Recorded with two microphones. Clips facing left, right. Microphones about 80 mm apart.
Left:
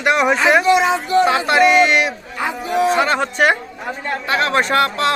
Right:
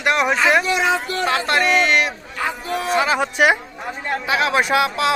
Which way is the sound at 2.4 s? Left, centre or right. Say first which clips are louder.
Left 6 dB; centre.